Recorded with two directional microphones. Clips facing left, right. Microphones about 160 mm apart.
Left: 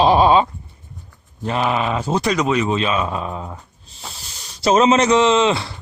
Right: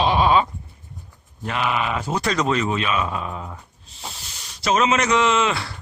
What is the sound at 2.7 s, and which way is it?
Speech, 25° left (ahead or behind).